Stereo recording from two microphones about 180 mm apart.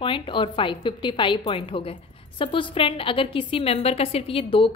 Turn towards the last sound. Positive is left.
turn(degrees=30)  # may be behind; listen again after turning